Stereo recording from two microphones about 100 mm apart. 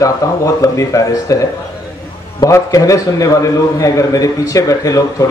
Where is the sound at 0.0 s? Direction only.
35° left (ahead or behind).